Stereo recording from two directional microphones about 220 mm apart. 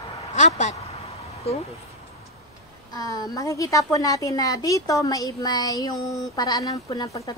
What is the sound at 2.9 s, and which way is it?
A woman's voice, 15° left (ahead or behind).